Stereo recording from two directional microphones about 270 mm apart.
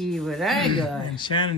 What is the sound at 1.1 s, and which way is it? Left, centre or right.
Speech, centre.